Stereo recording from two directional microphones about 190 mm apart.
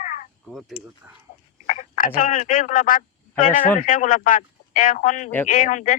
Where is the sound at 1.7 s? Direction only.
45° left (ahead or behind).